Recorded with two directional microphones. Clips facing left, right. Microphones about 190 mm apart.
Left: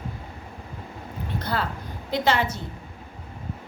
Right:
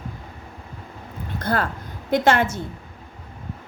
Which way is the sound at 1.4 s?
50° right (ahead or behind).